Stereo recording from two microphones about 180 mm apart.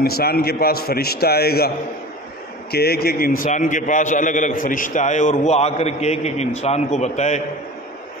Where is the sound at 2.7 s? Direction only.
60° left (ahead or behind); by 7.4 s 40° left (ahead or behind).